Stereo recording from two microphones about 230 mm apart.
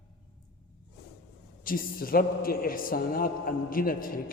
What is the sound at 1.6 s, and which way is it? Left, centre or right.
A man's voice, left.